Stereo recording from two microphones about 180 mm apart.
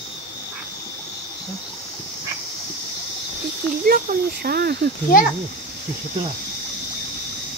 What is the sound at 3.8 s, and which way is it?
Speech, 55° right (ahead or behind).